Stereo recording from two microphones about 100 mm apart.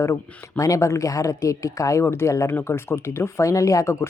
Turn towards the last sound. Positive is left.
turn(degrees=30)  # may be behind; listen again after turning